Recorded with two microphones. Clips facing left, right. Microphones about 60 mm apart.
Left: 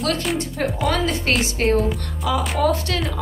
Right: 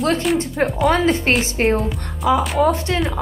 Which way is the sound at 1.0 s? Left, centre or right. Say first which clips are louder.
Right 4 dB; right.